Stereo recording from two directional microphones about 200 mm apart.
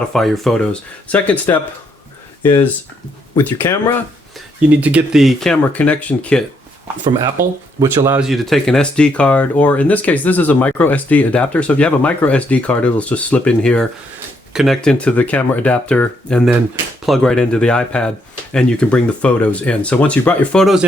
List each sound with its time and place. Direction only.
0.1 s speech: centre (ahead or behind)
4.4 s speech: 5° right (ahead or behind)
7.8 s speech: 15° right (ahead or behind)
8.2 s speech: centre (ahead or behind)